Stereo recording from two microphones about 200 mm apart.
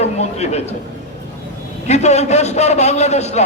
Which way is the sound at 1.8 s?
35° left (ahead or behind).